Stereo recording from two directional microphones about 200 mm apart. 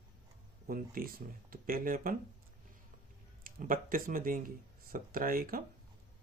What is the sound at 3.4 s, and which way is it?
Speech, 45° right (ahead or behind).